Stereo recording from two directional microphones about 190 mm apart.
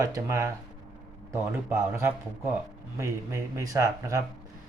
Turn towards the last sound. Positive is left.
turn(degrees=-15)  # may be behind; listen again after turning